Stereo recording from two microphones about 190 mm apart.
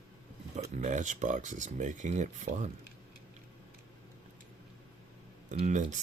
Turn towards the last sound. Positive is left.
turn(degrees=-40)  # may be behind; listen again after turning